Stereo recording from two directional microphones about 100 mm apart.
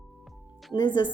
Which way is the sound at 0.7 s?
45° left (ahead or behind).